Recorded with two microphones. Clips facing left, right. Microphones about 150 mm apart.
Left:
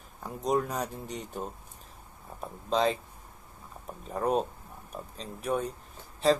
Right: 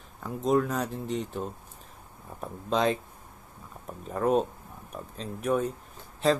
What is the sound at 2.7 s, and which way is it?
Speech, centre (ahead or behind).